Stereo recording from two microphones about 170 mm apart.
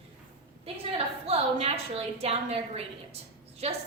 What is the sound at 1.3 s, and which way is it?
A woman's voice, 35° right (ahead or behind).